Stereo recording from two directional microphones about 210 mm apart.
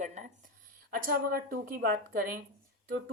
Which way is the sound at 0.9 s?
45° right (ahead or behind).